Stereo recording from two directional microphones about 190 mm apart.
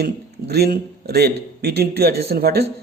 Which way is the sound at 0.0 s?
55° right (ahead or behind).